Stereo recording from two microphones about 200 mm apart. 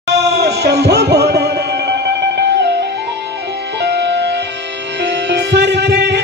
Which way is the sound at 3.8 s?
60° right (ahead or behind).